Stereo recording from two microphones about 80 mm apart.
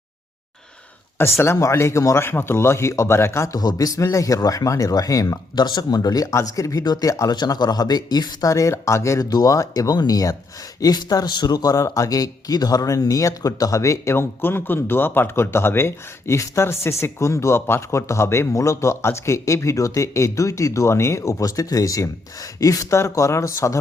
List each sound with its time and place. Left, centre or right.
1.2 s speech: left
3.5 s speech: left
6.3 s speech: left
7.3 s speech: left